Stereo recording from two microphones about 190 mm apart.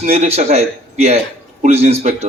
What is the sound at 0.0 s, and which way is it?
A man's voice, 35° right (ahead or behind).